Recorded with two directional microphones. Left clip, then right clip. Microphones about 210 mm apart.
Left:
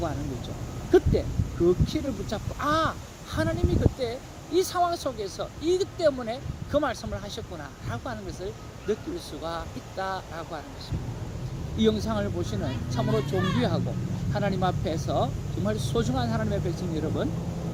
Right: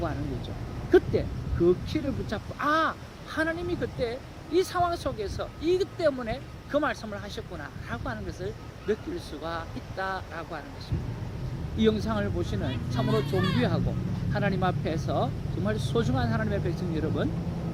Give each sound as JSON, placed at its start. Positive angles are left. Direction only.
{"t": 0.0, "sound": "speech", "side_deg": 0}
{"t": 11.8, "sound": "speech", "side_deg": 0}
{"t": 13.3, "sound": "speech", "side_deg": -45}
{"t": 13.6, "sound": "speech", "side_deg": 0}